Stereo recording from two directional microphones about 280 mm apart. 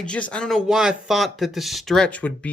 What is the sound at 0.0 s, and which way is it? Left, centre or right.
Speech, centre.